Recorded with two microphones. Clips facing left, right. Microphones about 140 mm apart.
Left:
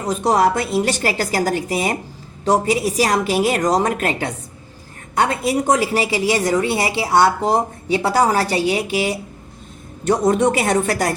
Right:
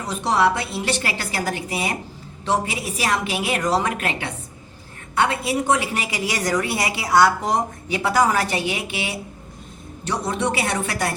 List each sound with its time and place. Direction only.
0.0 s a woman's voice: 45° left (ahead or behind)